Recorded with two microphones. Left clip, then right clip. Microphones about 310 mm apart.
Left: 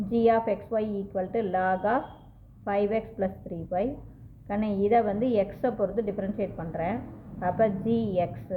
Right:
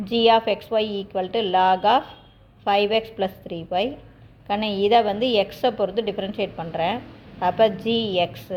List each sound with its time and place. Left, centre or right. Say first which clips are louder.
0.1 s a woman's voice: right 6 dB; centre